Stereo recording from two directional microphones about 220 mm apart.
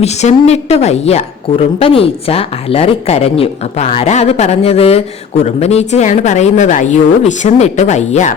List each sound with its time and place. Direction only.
0.0 s a woman's voice: 30° left (ahead or behind)